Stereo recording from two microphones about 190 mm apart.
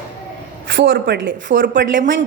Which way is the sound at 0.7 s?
75° right (ahead or behind).